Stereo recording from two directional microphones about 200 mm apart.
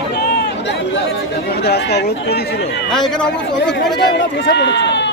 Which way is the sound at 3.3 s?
60° left (ahead or behind).